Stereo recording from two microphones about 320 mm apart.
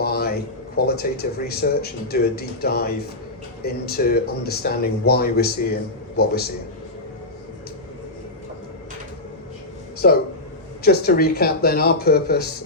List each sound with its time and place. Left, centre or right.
0.0 s a sound: left
0.9 s speech: left
10.0 s speech: left